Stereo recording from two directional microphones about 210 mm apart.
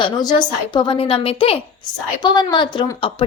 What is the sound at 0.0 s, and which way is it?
Speech, 20° left (ahead or behind).